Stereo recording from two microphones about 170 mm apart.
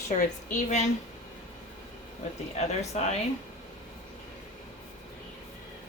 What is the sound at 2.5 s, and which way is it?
Speech, 40° left (ahead or behind).